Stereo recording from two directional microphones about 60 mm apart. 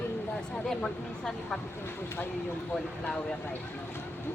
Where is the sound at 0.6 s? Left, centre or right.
Centre.